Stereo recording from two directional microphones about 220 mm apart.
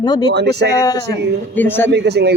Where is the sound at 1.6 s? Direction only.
10° left (ahead or behind).